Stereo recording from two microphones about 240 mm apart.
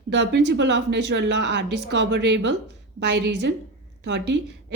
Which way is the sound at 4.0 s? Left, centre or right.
Right.